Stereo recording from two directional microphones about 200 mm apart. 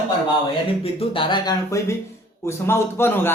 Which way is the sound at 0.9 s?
25° left (ahead or behind).